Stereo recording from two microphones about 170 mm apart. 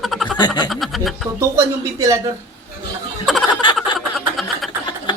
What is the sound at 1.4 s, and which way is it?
Speech, 15° right (ahead or behind).